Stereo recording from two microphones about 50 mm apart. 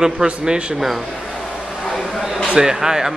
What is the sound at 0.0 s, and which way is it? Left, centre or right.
Speech, centre.